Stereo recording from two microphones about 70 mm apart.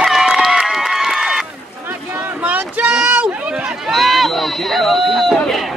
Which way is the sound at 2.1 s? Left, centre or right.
Right.